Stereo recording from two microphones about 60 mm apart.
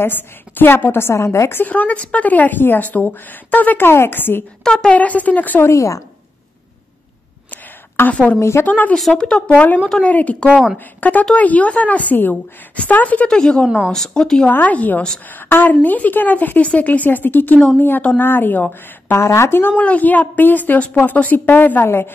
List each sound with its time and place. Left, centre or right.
0.0 s a woman's voice: left
1.1 s a woman's voice: left
1.5 s speech: left
4.6 s speech: centre
4.9 s speech: left
5.6 s a woman's voice: left
7.5 s a sound: left
8.1 s speech: left
8.4 s speech: left
8.6 s speech: left
13.3 s speech: centre
14.5 s a woman's voice: left
19.1 s speech: left
19.8 s a woman's voice: left